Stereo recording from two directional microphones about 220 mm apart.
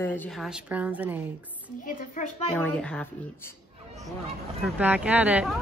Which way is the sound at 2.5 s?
5° left (ahead or behind).